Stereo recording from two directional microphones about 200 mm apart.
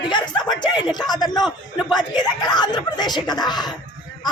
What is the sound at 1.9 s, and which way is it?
Speech, 20° left (ahead or behind).